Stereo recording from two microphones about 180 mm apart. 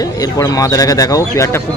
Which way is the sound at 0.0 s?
20° left (ahead or behind).